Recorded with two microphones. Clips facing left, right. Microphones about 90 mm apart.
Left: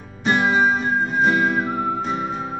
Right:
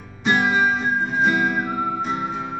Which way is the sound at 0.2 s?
Centre (ahead or behind).